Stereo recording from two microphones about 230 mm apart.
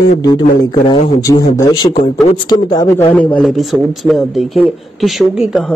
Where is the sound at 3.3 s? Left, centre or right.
Centre.